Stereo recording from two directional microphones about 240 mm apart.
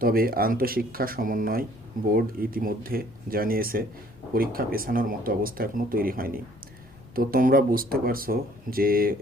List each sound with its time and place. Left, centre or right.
0.0 s speech: right